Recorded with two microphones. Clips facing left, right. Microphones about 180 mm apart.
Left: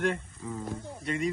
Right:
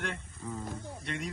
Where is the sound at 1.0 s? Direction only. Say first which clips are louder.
Left 8 dB; centre (ahead or behind).